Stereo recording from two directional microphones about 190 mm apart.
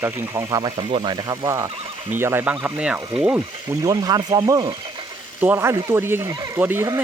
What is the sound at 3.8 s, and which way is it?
Speech, 20° right (ahead or behind).